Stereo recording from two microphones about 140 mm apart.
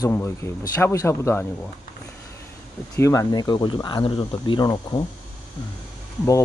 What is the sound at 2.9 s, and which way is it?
Speech, 20° left (ahead or behind).